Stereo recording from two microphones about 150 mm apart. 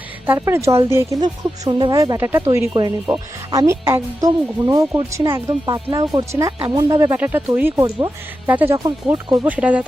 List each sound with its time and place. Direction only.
0.3 s speech: 20° right (ahead or behind)
7.8 s speech: 25° right (ahead or behind)
8.4 s speech: 15° right (ahead or behind)